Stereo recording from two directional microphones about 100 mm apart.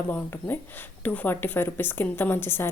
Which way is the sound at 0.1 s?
20° left (ahead or behind).